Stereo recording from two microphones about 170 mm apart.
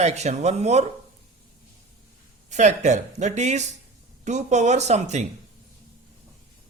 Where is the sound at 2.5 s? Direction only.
45° right (ahead or behind).